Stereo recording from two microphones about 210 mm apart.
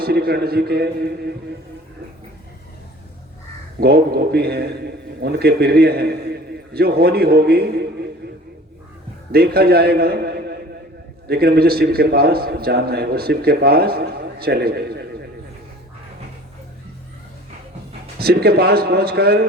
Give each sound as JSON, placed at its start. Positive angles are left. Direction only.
{"t": 0.0, "sound": "a man's voice", "side_deg": -50}
{"t": 3.8, "sound": "a man's voice", "side_deg": -50}
{"t": 9.3, "sound": "a man's voice", "side_deg": -45}
{"t": 18.2, "sound": "a man's voice", "side_deg": -50}